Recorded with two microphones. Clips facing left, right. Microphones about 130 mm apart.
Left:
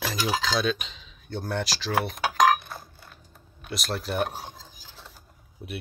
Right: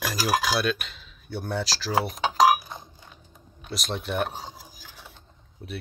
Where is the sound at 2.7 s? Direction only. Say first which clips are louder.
Even; 20° right (ahead or behind).